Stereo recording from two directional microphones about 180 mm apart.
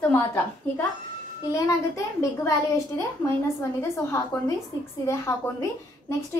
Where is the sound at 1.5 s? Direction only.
15° left (ahead or behind).